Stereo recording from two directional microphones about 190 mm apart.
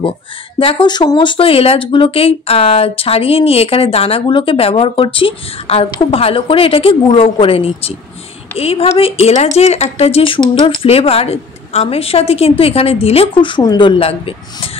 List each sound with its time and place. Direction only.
0.6 s speech: 25° left (ahead or behind)